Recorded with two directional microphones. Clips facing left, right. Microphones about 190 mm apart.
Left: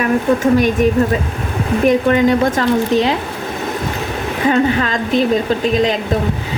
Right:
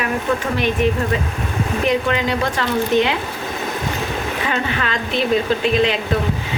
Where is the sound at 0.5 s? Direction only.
45° left (ahead or behind).